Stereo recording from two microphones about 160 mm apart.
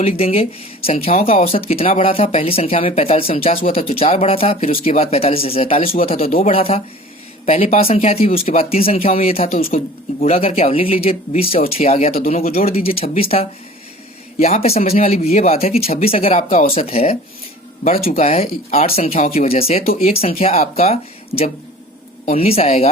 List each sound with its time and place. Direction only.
0.0 s speech: 40° left (ahead or behind)
12.1 s speech: 60° left (ahead or behind)
12.4 s speech: 40° left (ahead or behind)
19.8 s speech: 65° left (ahead or behind)
20.1 s speech: 40° left (ahead or behind)